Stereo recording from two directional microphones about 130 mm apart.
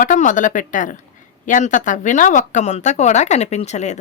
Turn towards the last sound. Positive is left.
turn(degrees=60)  # may be behind; listen again after turning